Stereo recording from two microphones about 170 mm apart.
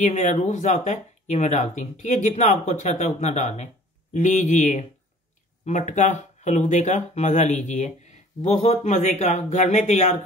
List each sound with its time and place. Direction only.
0.0 s speech: 45° left (ahead or behind)